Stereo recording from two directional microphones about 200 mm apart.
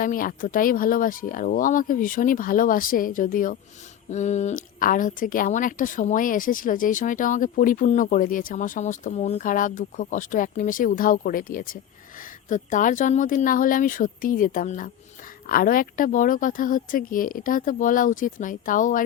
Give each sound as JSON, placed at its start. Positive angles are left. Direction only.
{"t": 0.0, "sound": "a woman's voice", "side_deg": 45}